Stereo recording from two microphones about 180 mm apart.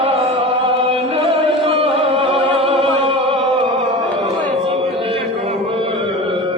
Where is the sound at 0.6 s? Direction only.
30° right (ahead or behind).